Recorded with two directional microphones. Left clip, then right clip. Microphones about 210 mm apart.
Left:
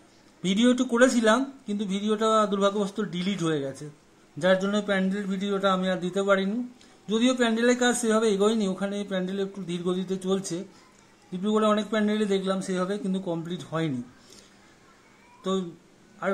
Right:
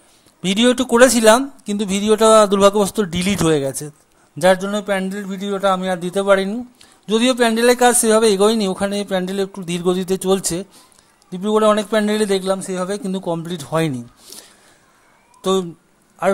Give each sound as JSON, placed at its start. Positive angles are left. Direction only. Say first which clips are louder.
{"t": 0.4, "sound": "a man's voice", "louder": "right 8 dB", "side_deg": -40}